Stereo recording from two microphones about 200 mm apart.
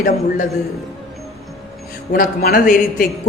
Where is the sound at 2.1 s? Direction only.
45° left (ahead or behind).